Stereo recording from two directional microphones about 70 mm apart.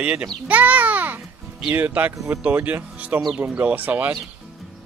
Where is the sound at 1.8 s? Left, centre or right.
Right.